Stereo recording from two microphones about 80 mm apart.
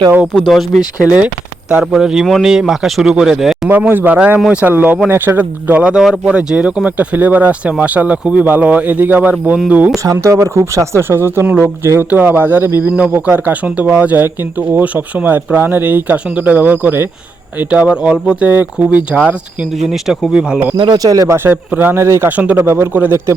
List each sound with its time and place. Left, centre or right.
0.3 s speech: centre
1.0 s speech: centre
3.7 s speech: right
9.9 s speech: right
19.8 s speech: centre
20.3 s speech: centre
20.7 s speech: right
21.2 s speech: right
21.9 s speech: right
22.3 s speech: centre